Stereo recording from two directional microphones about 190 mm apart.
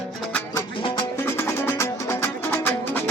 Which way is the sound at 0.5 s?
25° left (ahead or behind).